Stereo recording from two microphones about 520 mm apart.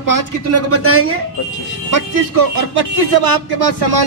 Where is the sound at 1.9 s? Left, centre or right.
Right.